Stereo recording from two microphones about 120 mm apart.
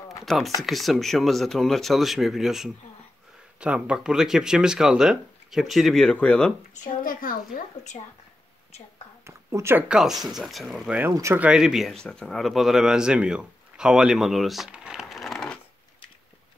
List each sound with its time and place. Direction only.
0.2 s speech: centre (ahead or behind)
9.2 s a sound: 25° right (ahead or behind)
9.8 s speech: 5° right (ahead or behind)
11.0 s speech: 25° right (ahead or behind)
11.3 s speech: 10° right (ahead or behind)